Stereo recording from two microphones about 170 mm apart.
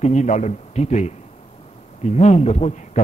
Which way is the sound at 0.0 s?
45° left (ahead or behind).